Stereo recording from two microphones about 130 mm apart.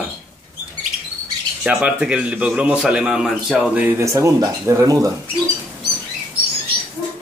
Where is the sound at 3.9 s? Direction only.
25° right (ahead or behind).